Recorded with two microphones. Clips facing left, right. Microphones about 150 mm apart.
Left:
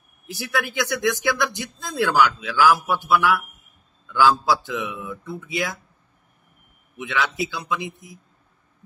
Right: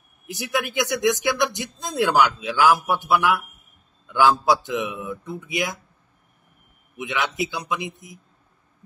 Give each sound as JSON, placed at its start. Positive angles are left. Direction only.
{"t": 0.3, "sound": "speech", "side_deg": -20}
{"t": 7.0, "sound": "speech", "side_deg": -20}